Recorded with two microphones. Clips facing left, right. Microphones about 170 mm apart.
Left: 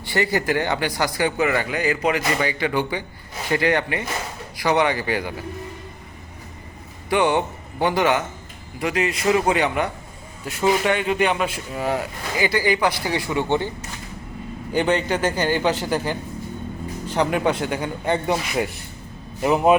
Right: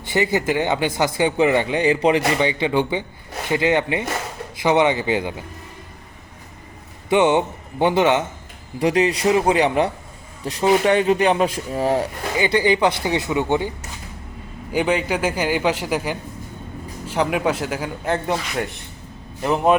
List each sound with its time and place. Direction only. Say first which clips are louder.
0.0 s speech: right 2 dB; 20° right (ahead or behind)
7.1 s speech: right 3 dB; 20° right (ahead or behind)
8.8 s a man's voice: right 5 dB; 30° right (ahead or behind); by 13.7 s 15° right (ahead or behind)
14.7 s a man's voice: even; 5° right (ahead or behind)